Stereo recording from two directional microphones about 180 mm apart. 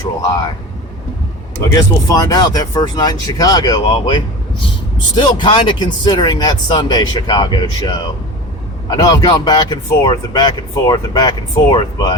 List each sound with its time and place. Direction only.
0.0 s speech: 20° left (ahead or behind)
1.7 s speech: 20° left (ahead or behind)